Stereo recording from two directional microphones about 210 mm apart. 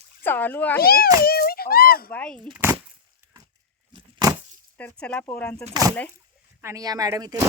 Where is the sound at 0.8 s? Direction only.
45° left (ahead or behind).